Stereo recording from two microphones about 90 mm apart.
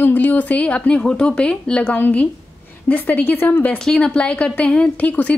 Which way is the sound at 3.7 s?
10° left (ahead or behind).